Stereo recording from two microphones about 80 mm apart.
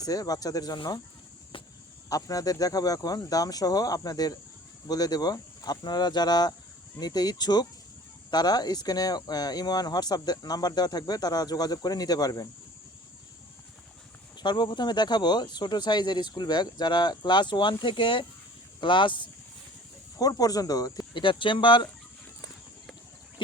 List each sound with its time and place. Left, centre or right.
0.0 s speech: left
1.5 s cricket: left
2.0 s speech: left
14.3 s speech: left
20.1 s speech: left
21.1 s speech: left